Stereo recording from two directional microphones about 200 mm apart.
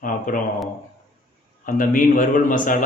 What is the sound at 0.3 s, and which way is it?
Speech, 45° left (ahead or behind).